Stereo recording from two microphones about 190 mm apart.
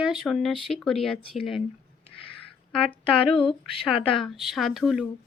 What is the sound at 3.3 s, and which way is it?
Speech, 30° left (ahead or behind).